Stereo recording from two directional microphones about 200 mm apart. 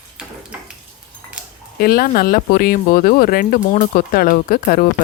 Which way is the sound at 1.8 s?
50° left (ahead or behind).